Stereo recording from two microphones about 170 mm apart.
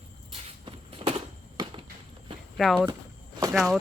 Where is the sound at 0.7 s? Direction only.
35° right (ahead or behind).